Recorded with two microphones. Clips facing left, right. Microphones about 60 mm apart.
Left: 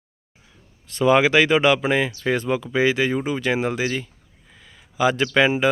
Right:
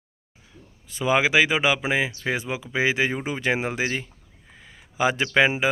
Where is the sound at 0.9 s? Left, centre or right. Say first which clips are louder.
Left 5 dB; centre.